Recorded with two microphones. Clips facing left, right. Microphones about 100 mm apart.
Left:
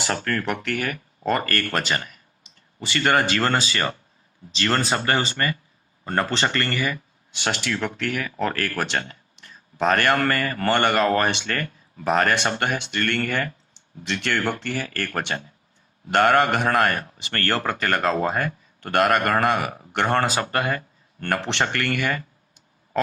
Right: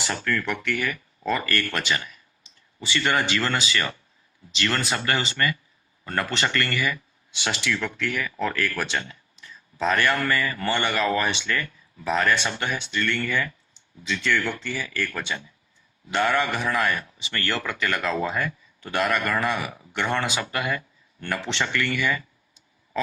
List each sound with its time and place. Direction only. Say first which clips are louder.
0.3 s a man's voice: left 1 dB; 45° left (ahead or behind)